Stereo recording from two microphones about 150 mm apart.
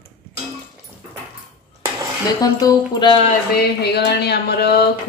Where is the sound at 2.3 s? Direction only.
25° left (ahead or behind).